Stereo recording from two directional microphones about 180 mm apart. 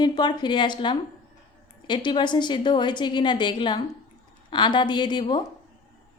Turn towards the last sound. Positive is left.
turn(degrees=25)  # may be behind; listen again after turning